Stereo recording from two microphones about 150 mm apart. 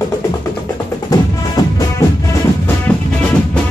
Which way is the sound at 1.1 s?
25° left (ahead or behind).